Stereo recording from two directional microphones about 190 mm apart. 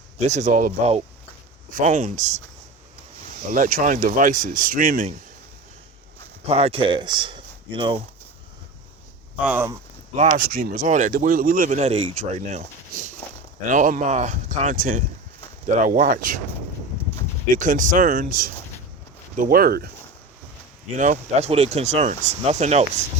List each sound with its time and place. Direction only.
0.2 s speech: 35° right (ahead or behind)
3.5 s speech: 45° right (ahead or behind)
6.5 s speech: 30° right (ahead or behind)
9.4 s speech: 10° right (ahead or behind)
10.2 s speech: 45° right (ahead or behind)
17.5 s speech: 45° right (ahead or behind)
20.8 s speech: 40° right (ahead or behind)